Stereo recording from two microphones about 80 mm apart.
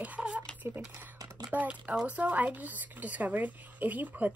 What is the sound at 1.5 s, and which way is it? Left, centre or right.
Speech, centre.